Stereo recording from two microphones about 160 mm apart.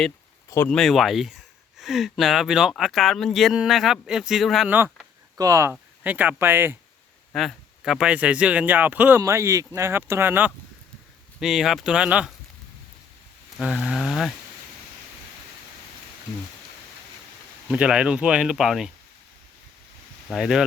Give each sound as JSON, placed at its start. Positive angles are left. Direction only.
{"t": 0.7, "sound": "speech", "side_deg": 0}
{"t": 5.4, "sound": "speech", "side_deg": -20}
{"t": 5.7, "sound": "speech", "side_deg": -10}
{"t": 7.3, "sound": "a man's voice", "side_deg": 0}
{"t": 11.3, "sound": "speech", "side_deg": 0}
{"t": 13.6, "sound": "speech", "side_deg": -5}
{"t": 17.7, "sound": "speech", "side_deg": -5}
{"t": 20.3, "sound": "speech", "side_deg": -5}